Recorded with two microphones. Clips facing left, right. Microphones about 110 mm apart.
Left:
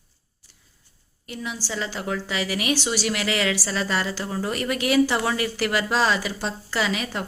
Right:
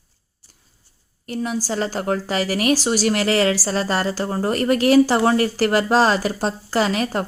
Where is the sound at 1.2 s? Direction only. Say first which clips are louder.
Right 8 dB; 40° right (ahead or behind).